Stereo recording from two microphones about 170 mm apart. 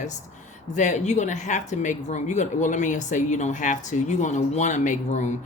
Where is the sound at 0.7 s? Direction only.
45° left (ahead or behind).